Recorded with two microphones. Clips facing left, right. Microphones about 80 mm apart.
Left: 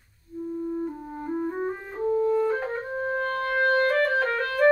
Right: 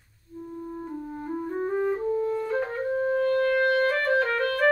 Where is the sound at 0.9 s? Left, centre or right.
Centre.